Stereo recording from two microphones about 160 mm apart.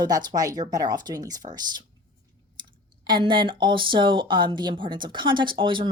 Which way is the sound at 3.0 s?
30° right (ahead or behind).